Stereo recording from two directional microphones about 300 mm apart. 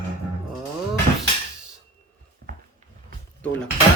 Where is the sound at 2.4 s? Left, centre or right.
Right.